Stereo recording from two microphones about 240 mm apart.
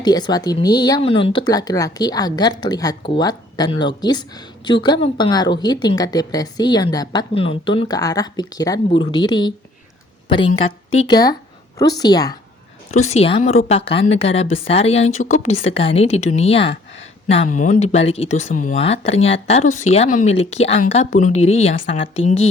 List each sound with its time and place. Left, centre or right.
0.0 s a woman's voice: centre
12.9 s speech: left